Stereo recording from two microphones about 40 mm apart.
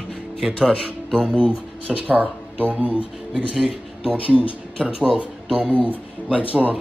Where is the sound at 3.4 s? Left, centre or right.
Centre.